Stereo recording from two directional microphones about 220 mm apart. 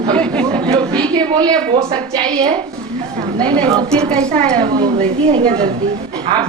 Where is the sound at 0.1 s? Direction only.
5° left (ahead or behind).